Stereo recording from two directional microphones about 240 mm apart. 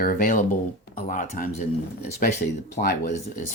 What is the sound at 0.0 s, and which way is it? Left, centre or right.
Speech, left.